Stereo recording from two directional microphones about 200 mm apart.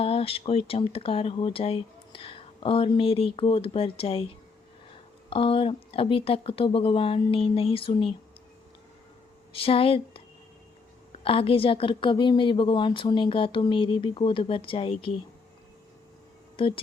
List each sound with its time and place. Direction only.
0.0 s speech: 30° left (ahead or behind)
5.3 s speech: 25° left (ahead or behind)
9.5 s speech: 30° left (ahead or behind)
16.6 s speech: 25° left (ahead or behind)